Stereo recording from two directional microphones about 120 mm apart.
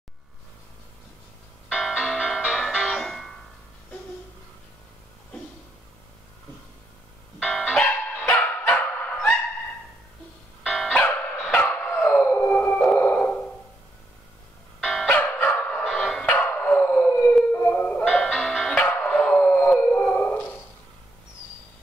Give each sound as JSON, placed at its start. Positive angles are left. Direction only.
{"t": 1.7, "sound": "music", "side_deg": 0}
{"t": 7.3, "sound": "music", "side_deg": 0}
{"t": 8.6, "sound": "honk", "side_deg": 15}
{"t": 10.6, "sound": "music", "side_deg": 0}
{"t": 11.0, "sound": "music", "side_deg": 15}
{"t": 11.4, "sound": "bow-wow", "side_deg": 10}
{"t": 12.2, "sound": "howl", "side_deg": 15}
{"t": 12.8, "sound": "sonar", "side_deg": 10}
{"t": 14.8, "sound": "music", "side_deg": 0}
{"t": 15.0, "sound": "dog", "side_deg": 20}
{"t": 17.5, "sound": "music", "side_deg": 15}
{"t": 18.0, "sound": "music", "side_deg": 5}
{"t": 18.8, "sound": "dog", "side_deg": 15}
{"t": 19.8, "sound": "a sound", "side_deg": 15}